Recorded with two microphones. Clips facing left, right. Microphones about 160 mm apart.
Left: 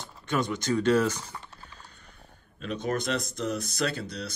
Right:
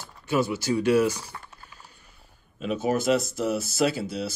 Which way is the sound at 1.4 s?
10° right (ahead or behind).